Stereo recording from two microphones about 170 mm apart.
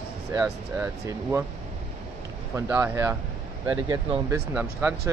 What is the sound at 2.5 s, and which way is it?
Speech, 15° right (ahead or behind).